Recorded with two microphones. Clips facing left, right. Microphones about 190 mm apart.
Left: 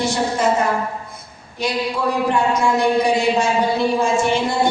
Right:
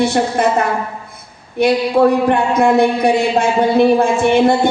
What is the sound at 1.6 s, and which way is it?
A man's voice, 60° right (ahead or behind).